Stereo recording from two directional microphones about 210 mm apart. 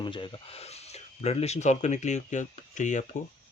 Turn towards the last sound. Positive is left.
turn(degrees=35)  # may be behind; listen again after turning